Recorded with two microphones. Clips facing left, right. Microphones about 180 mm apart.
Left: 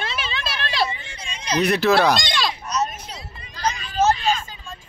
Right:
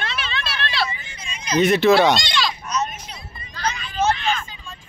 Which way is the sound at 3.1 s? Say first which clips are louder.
Left 1 dB; 90° left.